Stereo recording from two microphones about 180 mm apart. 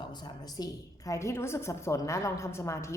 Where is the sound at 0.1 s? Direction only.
25° left (ahead or behind).